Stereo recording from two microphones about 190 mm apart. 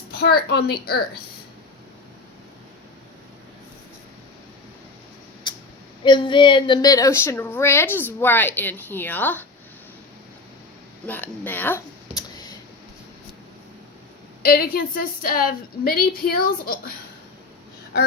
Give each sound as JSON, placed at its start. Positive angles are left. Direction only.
{"t": 0.2, "sound": "a woman's voice", "side_deg": 55}
{"t": 6.1, "sound": "a woman's voice", "side_deg": 25}
{"t": 11.0, "sound": "a sound", "side_deg": 10}
{"t": 14.4, "sound": "a woman's voice", "side_deg": 55}